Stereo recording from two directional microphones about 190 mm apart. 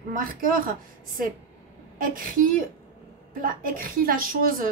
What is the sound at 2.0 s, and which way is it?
A woman's voice, 45° right (ahead or behind).